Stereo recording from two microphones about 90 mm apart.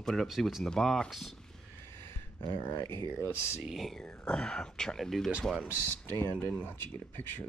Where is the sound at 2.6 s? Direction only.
30° left (ahead or behind).